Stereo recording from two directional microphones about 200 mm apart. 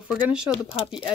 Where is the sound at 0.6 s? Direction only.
30° left (ahead or behind).